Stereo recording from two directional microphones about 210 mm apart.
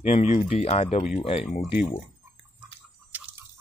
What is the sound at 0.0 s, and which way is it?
Speech, 30° left (ahead or behind).